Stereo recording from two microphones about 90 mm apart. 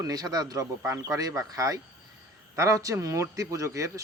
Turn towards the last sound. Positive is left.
turn(degrees=-35)  # may be behind; listen again after turning